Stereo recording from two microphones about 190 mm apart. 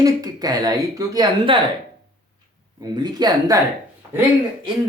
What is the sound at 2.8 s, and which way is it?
Speech, 20° right (ahead or behind).